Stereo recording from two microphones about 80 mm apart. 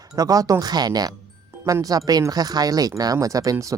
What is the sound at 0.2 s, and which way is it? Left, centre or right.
Speech, right.